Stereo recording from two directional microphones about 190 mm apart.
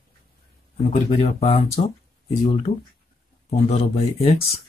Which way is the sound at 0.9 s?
35° left (ahead or behind).